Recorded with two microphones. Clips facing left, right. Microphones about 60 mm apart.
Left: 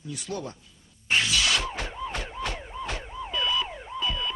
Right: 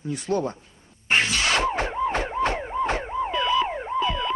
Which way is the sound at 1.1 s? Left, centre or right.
Right.